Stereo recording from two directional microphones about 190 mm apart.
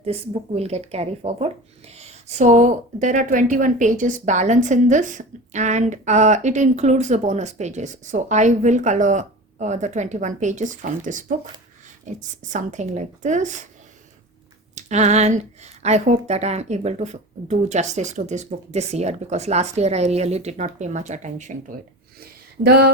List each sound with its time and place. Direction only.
0.0 s speech: 35° right (ahead or behind)
14.8 s speech: 35° right (ahead or behind)
22.2 s a sound: 55° right (ahead or behind)